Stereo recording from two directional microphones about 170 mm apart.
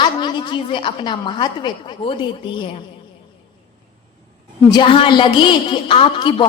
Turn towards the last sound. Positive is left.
turn(degrees=30)  # may be behind; listen again after turning